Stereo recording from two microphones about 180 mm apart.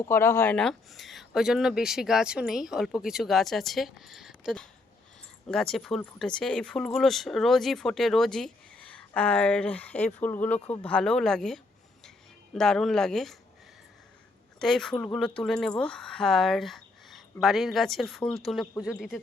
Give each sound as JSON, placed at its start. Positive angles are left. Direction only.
{"t": 0.0, "sound": "speech", "side_deg": 15}
{"t": 14.6, "sound": "speech", "side_deg": 5}